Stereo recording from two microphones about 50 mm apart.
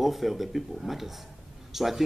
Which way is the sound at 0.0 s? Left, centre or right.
Centre.